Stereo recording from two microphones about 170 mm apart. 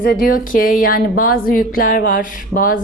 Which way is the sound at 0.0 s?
60° left (ahead or behind).